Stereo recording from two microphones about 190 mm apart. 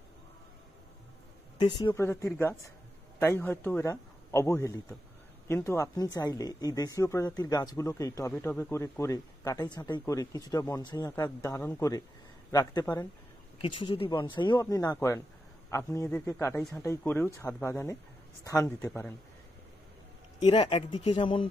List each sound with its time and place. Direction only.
1.6 s speech: 20° left (ahead or behind)
20.3 s speech: 25° left (ahead or behind)